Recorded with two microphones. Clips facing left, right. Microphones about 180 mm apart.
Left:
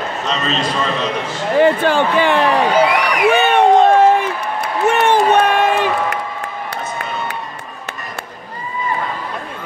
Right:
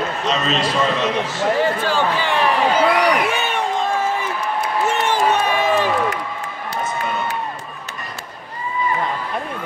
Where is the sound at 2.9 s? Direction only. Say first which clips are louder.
Left 3 dB; 60° left (ahead or behind).